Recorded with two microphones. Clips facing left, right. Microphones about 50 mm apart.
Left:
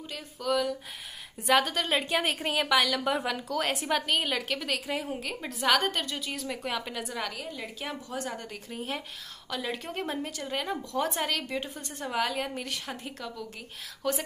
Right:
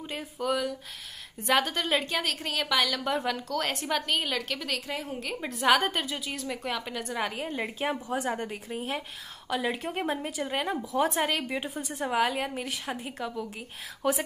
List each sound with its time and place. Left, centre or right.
0.2 s a woman's voice: centre
2.2 s a woman's voice: centre
2.6 s a woman's voice: centre
7.2 s a woman's voice: right
7.4 s a woman's voice: right
8.3 s a woman's voice: right
8.6 s speech: centre